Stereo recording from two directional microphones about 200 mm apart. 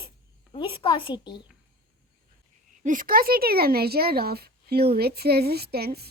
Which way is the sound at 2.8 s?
40° right (ahead or behind).